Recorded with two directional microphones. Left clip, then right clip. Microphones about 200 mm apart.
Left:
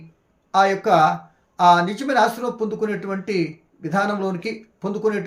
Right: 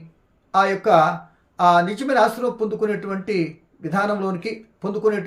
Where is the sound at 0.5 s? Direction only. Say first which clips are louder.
Even; 5° right (ahead or behind).